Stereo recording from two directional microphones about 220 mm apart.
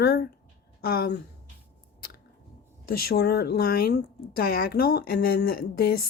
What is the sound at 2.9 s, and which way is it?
Speech, 45° left (ahead or behind).